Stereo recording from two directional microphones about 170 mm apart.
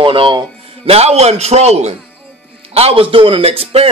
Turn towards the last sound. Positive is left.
turn(degrees=-35)  # may be behind; listen again after turning